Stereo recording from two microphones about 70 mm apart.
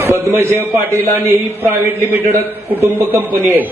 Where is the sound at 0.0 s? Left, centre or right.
Right.